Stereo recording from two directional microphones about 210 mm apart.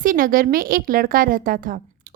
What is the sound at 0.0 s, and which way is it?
A woman's voice, 40° right (ahead or behind).